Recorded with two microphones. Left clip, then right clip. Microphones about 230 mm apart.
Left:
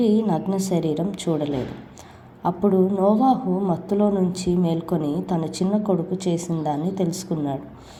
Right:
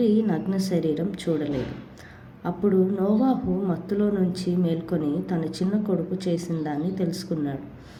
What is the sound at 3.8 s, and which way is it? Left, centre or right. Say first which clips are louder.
A woman's voice: left 4 dB; centre.